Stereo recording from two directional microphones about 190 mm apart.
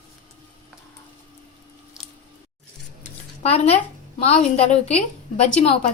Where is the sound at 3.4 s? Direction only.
30° left (ahead or behind).